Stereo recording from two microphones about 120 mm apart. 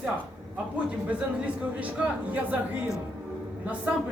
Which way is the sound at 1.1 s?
10° right (ahead or behind).